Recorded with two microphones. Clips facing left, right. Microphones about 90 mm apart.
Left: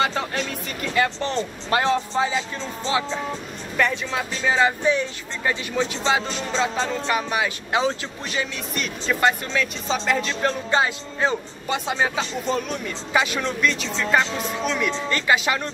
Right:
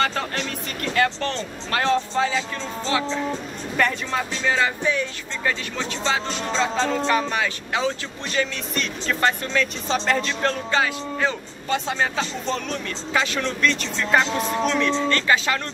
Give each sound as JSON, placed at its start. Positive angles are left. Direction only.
{"t": 0.0, "sound": "vehicle", "side_deg": 15}
{"t": 0.9, "sound": "speech", "side_deg": 15}
{"t": 3.7, "sound": "speech", "side_deg": 5}
{"t": 4.5, "sound": "speech", "side_deg": 20}
{"t": 10.7, "sound": "speech", "side_deg": 25}